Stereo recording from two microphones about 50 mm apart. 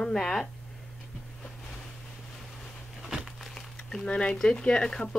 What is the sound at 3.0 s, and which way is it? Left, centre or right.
Crumpling, centre.